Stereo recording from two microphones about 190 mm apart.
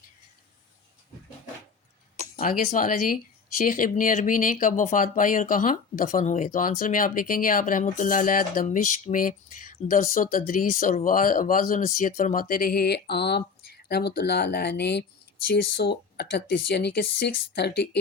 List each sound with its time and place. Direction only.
2.3 s speech: 50° left (ahead or behind)